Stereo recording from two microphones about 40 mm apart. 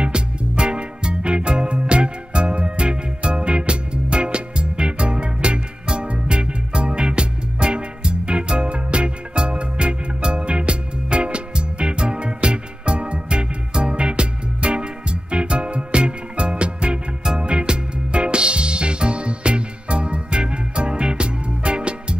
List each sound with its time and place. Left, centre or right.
0.0 s music: right